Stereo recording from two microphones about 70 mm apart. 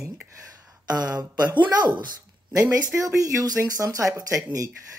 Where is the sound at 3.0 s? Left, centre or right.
Right.